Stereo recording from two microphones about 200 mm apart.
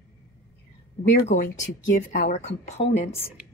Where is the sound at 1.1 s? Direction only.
60° left (ahead or behind).